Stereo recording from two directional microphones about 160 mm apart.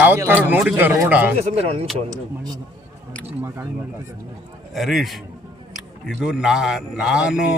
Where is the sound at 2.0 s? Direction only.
25° right (ahead or behind).